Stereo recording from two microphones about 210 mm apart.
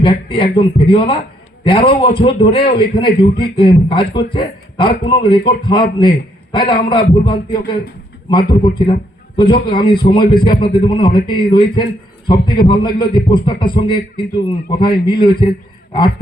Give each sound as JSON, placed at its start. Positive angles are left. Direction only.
{"t": 0.0, "sound": "a man's voice", "side_deg": 25}